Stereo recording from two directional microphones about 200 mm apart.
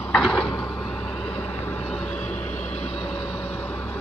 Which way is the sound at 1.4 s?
5° left (ahead or behind).